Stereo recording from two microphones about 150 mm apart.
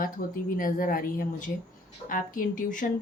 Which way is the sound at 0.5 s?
65° left (ahead or behind).